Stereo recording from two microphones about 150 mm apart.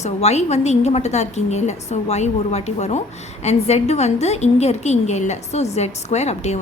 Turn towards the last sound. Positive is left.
turn(degrees=45)  # may be behind; listen again after turning